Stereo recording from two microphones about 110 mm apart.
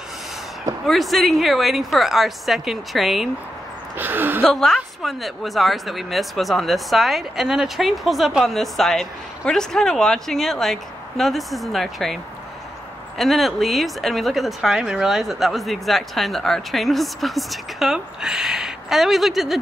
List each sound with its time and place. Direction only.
0.8 s speech: centre (ahead or behind)
4.0 s a woman's voice: 15° right (ahead or behind)
4.4 s speech: 5° left (ahead or behind)
13.2 s speech: centre (ahead or behind)